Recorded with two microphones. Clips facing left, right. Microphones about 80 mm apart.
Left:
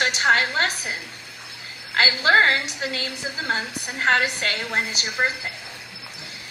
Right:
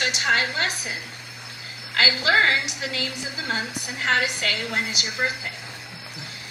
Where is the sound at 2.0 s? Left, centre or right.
Left.